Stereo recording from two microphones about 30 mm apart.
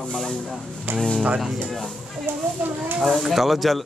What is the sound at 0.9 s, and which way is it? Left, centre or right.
Speech, right.